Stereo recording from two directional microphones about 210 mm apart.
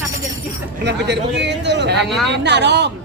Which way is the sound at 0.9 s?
55° right (ahead or behind).